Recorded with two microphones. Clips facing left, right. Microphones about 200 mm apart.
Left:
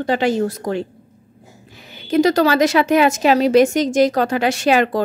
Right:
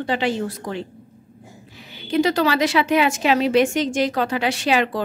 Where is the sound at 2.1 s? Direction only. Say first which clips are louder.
Left 4 dB; 40° left (ahead or behind).